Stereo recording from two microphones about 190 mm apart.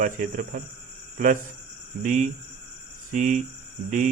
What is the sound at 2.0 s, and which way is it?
Speech, 45° right (ahead or behind).